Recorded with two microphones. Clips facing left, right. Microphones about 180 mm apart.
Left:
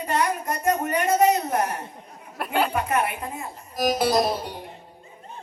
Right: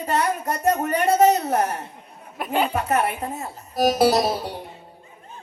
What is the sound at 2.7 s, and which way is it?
Speech, 40° right (ahead or behind).